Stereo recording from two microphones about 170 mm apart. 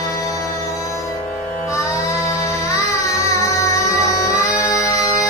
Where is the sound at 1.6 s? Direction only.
15° left (ahead or behind).